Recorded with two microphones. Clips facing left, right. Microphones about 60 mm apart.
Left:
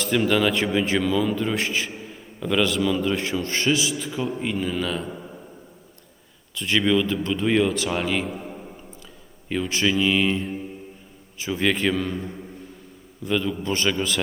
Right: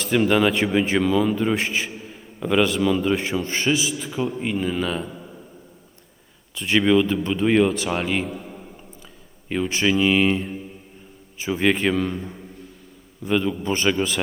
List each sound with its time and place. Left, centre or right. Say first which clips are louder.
0.3 s a man's voice: right 2 dB; centre
5.0 s a sound: left 2 dB; centre
6.6 s a man's voice: right 3 dB; centre
8.2 s a sound: even; centre
9.5 s a man's voice: right 2 dB; centre
11.5 s a man's voice: right 2 dB; centre